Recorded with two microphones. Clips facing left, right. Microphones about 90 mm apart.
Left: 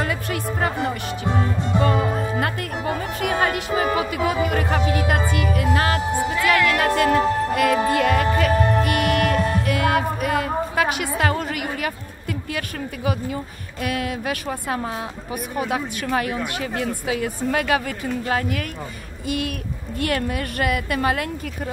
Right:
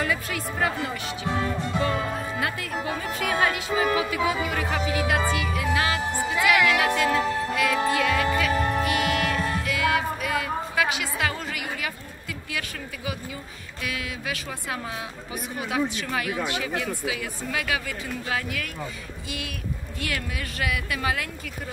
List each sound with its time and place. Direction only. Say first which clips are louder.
0.0 s music: left 3 dB; 45° left (ahead or behind)
1.2 s music: left 3 dB; 25° left (ahead or behind)
2.3 s music: left 4 dB; 40° left (ahead or behind)
6.3 s music: left 1 dB; 15° right (ahead or behind)
6.8 s music: left 5 dB; 45° left (ahead or behind)
12.5 s speech: left 5 dB; 50° left (ahead or behind)
19.2 s speech: left 9 dB; 50° left (ahead or behind)